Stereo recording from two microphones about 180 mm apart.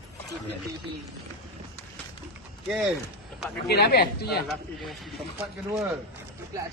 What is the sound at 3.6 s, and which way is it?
Speech, 65° left (ahead or behind).